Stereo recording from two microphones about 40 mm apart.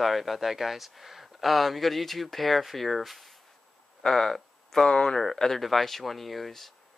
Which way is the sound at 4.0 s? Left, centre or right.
Centre.